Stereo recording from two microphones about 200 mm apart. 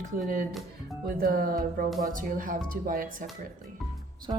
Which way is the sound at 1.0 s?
45° right (ahead or behind).